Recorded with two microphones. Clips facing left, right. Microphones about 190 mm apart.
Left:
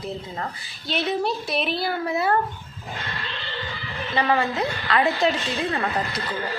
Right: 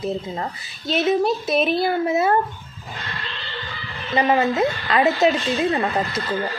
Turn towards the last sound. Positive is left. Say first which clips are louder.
# right 4 dB
turn(degrees=-20)  # may be behind; listen again after turning